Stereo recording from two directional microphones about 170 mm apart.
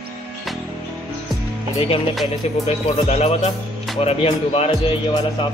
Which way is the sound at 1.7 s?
35° left (ahead or behind).